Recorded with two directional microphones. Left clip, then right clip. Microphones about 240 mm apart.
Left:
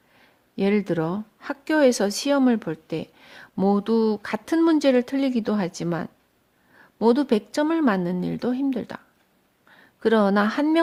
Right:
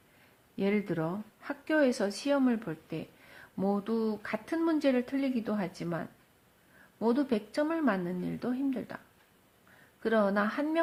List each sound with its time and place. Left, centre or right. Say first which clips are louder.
0.5 s speech: left 8 dB; left
10.0 s speech: left 8 dB; left